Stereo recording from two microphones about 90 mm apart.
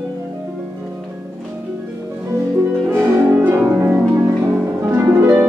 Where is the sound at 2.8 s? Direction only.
20° right (ahead or behind).